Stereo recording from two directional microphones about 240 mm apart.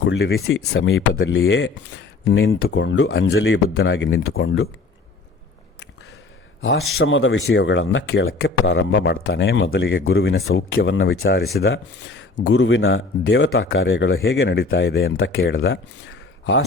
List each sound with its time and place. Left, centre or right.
0.0 s speech: left
3.2 s speech: left
7.0 s speech: left